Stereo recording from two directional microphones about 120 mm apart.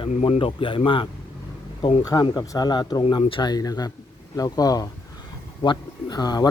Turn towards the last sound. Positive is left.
turn(degrees=35)  # may be behind; listen again after turning